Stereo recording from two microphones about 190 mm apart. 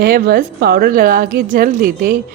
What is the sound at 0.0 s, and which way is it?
A woman's voice, 50° right (ahead or behind).